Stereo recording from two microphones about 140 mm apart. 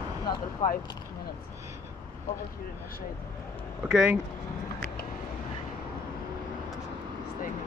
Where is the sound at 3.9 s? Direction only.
5° right (ahead or behind).